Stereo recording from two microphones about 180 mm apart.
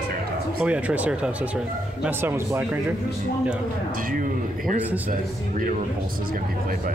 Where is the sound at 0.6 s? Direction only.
5° right (ahead or behind).